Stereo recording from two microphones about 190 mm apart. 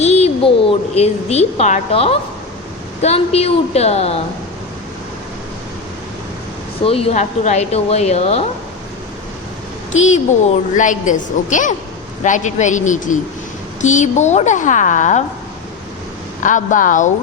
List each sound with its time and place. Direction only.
0.0 s a woman's voice: 35° left (ahead or behind)
6.8 s speech: 30° left (ahead or behind)
9.9 s speech: 40° left (ahead or behind)
16.4 s a woman's voice: 40° left (ahead or behind)